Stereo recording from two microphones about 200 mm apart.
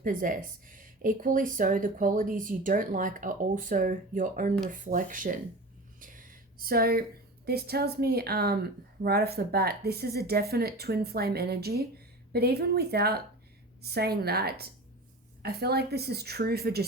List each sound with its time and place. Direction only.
0.0 s speech: 40° right (ahead or behind)
6.0 s a sound: 45° right (ahead or behind)
7.4 s speech: 50° right (ahead or behind)